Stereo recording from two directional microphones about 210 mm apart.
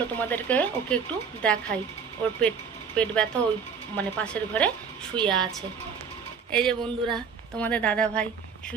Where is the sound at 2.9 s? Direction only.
5° left (ahead or behind).